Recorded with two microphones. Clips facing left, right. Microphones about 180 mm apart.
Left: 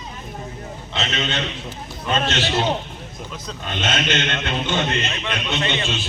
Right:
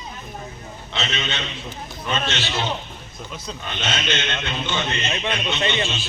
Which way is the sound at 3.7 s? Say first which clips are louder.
Left 4 dB; 50° left (ahead or behind).